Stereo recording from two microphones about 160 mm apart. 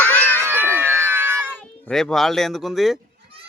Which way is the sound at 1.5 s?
5° left (ahead or behind).